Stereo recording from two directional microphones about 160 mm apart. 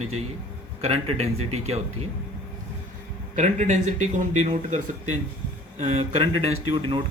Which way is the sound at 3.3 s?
45° right (ahead or behind).